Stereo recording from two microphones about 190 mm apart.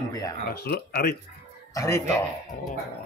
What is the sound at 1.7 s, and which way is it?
Speech, 15° left (ahead or behind).